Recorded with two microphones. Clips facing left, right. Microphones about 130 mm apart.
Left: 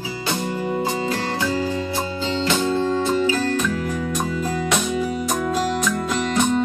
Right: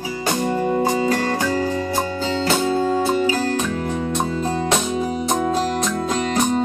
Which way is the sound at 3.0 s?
35° right (ahead or behind).